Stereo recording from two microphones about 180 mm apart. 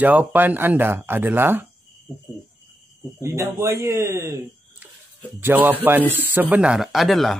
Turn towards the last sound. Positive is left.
turn(degrees=0)  # may be behind; listen again after turning